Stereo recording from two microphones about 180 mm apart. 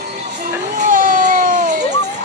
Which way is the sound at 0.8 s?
50° right (ahead or behind).